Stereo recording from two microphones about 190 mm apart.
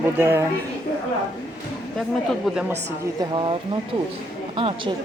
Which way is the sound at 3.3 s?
25° right (ahead or behind).